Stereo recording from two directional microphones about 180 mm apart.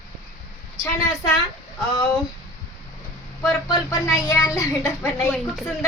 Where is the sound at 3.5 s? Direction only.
15° left (ahead or behind).